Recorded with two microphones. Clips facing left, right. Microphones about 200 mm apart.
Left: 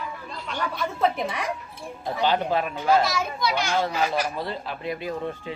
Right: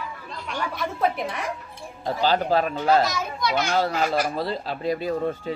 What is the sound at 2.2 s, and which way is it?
Speech, 35° right (ahead or behind).